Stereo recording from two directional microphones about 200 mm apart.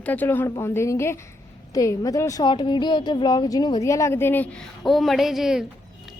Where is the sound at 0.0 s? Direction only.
10° left (ahead or behind).